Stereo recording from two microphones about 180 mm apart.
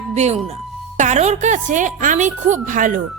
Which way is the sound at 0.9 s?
40° right (ahead or behind).